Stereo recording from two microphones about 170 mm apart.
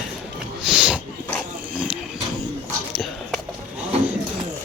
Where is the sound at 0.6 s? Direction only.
5° right (ahead or behind).